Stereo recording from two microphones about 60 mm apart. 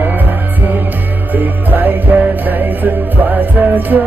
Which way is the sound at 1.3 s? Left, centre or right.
Right.